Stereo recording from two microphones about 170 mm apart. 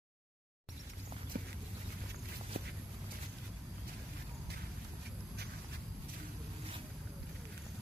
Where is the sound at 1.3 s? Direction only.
60° right (ahead or behind).